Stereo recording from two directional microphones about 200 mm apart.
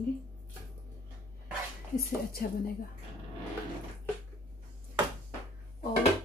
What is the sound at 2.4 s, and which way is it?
Speech, 45° left (ahead or behind).